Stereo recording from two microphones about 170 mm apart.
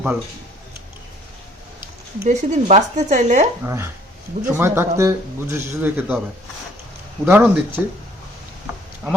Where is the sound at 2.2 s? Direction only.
45° right (ahead or behind).